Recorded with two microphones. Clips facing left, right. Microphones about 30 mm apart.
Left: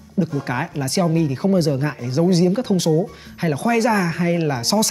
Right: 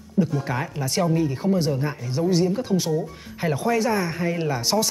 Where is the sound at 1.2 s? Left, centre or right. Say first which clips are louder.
Left 4 dB; left.